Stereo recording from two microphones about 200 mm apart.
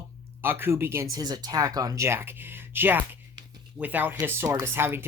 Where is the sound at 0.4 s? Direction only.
10° right (ahead or behind).